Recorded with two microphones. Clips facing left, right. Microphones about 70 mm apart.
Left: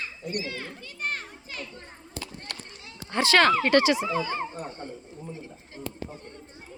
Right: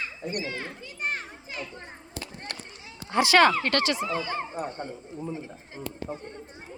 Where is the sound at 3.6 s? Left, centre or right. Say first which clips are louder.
Left 5 dB; centre.